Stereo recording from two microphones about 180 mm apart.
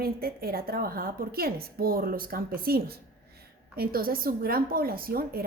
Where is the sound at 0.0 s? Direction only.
60° right (ahead or behind).